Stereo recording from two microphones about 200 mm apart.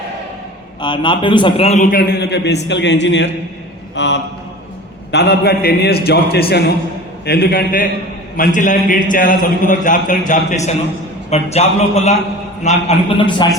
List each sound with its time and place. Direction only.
0.8 s a man's voice: 25° left (ahead or behind)